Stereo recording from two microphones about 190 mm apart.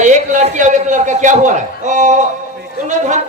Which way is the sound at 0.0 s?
40° right (ahead or behind).